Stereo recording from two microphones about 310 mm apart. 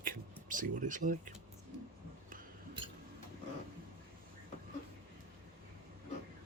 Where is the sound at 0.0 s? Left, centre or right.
Right.